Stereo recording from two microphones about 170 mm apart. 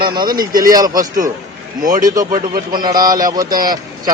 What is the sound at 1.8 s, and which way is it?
Speech, 55° right (ahead or behind).